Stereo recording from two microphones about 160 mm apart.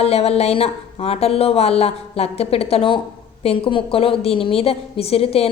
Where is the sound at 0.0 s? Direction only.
40° left (ahead or behind).